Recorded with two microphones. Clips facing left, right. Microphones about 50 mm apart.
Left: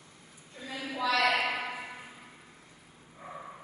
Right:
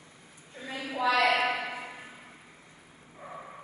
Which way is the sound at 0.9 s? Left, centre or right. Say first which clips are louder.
Right 2 dB; right.